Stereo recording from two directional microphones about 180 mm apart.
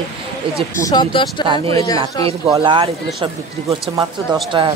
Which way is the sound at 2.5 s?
30° right (ahead or behind).